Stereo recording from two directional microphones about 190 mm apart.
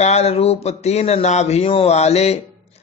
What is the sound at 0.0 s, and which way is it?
Speech, 35° left (ahead or behind).